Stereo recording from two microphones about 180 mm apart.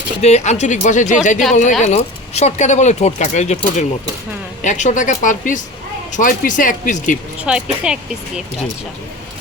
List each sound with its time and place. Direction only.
0.2 s speech: 40° left (ahead or behind)
7.4 s speech: 5° right (ahead or behind)